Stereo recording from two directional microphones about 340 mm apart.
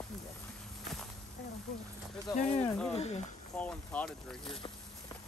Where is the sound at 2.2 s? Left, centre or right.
Centre.